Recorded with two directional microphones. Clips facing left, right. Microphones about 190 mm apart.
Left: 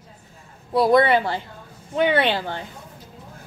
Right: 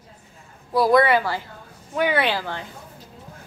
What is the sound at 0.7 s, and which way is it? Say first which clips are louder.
Speech: left 1 dB; 25° left (ahead or behind).